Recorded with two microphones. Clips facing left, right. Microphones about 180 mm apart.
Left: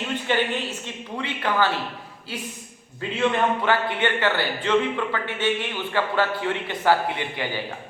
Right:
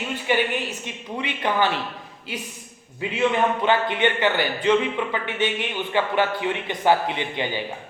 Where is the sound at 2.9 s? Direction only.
15° right (ahead or behind).